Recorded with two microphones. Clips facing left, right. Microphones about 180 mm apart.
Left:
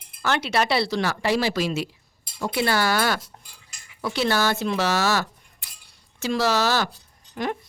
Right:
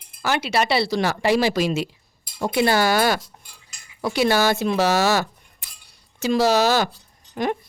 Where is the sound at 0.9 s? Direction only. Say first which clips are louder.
Right 3 dB; 15° right (ahead or behind).